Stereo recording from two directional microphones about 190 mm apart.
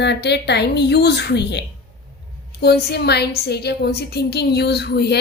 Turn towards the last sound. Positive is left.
turn(degrees=60)  # may be behind; listen again after turning